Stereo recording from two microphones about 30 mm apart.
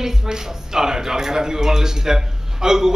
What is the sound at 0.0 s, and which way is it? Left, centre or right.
A woman's voice, centre.